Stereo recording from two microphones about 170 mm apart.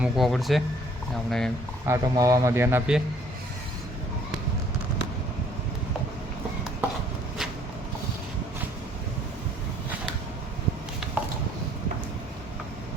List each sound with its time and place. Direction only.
0.0 s speech: centre (ahead or behind)
1.9 s a man's voice: 20° right (ahead or behind)
11.0 s a sound: 5° right (ahead or behind)